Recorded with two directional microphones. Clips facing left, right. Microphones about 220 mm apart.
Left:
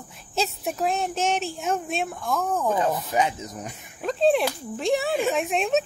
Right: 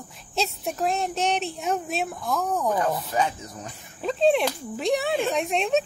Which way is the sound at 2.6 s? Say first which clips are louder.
Left 1 dB; 20° left (ahead or behind).